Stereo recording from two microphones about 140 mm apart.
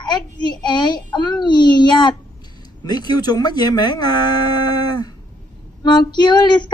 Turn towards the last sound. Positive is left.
turn(degrees=30)  # may be behind; listen again after turning